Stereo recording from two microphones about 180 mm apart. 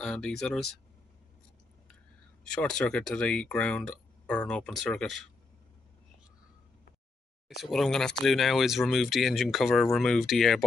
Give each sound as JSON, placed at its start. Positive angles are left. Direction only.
{"t": 0.0, "sound": "speech", "side_deg": 5}
{"t": 2.4, "sound": "speech", "side_deg": 5}
{"t": 7.4, "sound": "speech", "side_deg": 0}